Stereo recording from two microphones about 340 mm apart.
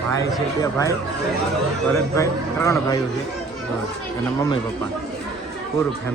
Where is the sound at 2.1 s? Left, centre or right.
Centre.